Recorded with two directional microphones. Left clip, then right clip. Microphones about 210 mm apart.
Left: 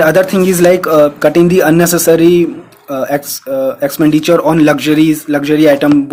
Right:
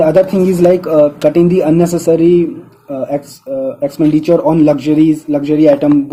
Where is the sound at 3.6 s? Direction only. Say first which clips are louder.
Left 2 dB; 35° left (ahead or behind).